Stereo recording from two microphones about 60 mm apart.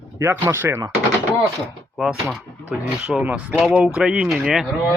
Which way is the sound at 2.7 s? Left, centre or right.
Centre.